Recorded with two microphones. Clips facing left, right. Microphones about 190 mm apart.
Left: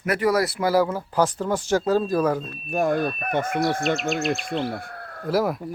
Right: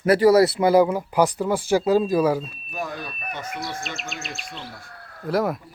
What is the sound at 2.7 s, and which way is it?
Speech, 50° left (ahead or behind).